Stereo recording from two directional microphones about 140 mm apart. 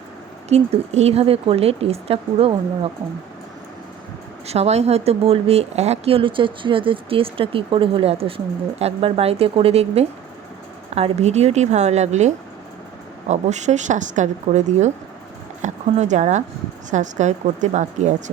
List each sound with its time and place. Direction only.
0.4 s speech: 50° right (ahead or behind)
4.4 s a woman's voice: 50° right (ahead or behind)